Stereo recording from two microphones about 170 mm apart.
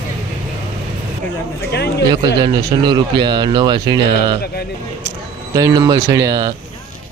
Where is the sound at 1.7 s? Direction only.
75° left (ahead or behind).